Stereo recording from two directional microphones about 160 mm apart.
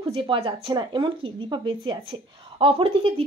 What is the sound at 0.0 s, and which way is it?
Speech, 35° right (ahead or behind).